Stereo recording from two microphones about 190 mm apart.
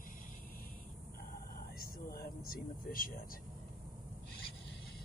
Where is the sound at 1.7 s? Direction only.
50° left (ahead or behind).